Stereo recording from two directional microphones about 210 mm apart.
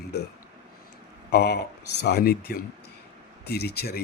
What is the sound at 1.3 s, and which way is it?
A man's voice, 50° left (ahead or behind).